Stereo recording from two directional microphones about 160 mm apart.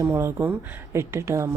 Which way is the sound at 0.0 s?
15° right (ahead or behind).